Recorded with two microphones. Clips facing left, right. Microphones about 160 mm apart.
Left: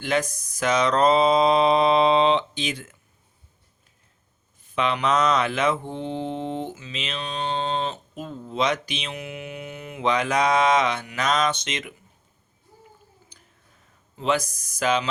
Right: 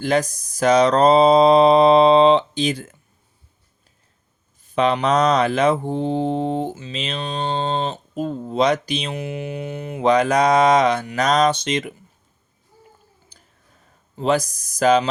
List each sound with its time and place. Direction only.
0.0 s mantra: 35° right (ahead or behind)
4.7 s mantra: 35° right (ahead or behind)
13.3 s a sound: 35° right (ahead or behind)
14.2 s mantra: 35° right (ahead or behind)